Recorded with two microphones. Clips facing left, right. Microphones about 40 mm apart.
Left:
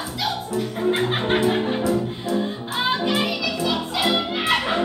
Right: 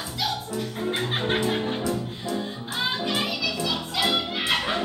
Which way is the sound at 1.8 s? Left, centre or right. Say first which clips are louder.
Left 6 dB; left.